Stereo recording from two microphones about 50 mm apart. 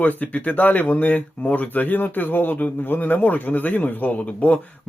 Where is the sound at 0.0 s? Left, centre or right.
Left.